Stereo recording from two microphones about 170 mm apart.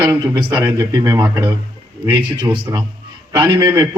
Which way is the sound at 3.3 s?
15° right (ahead or behind).